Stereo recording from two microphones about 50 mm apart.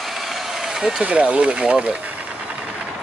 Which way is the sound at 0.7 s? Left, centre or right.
Centre.